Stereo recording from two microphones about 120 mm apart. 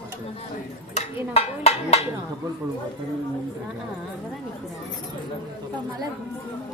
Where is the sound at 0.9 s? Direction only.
60° left (ahead or behind).